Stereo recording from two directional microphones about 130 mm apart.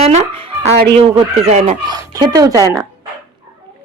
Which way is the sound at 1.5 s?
60° right (ahead or behind).